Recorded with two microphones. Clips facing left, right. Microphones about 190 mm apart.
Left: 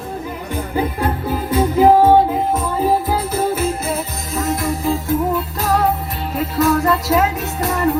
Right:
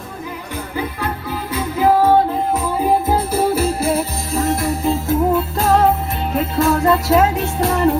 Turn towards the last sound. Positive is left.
turn(degrees=-30)  # may be behind; listen again after turning